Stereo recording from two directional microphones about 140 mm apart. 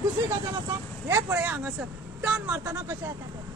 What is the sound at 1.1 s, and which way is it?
Speech, 15° right (ahead or behind).